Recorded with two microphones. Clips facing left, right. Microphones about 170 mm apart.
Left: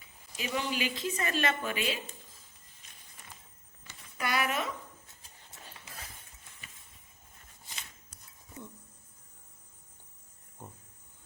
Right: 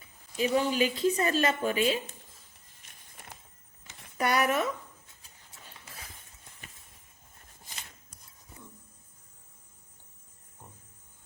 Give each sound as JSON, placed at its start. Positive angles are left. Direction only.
{"t": 0.3, "sound": "speech", "side_deg": -40}
{"t": 4.2, "sound": "speech", "side_deg": -50}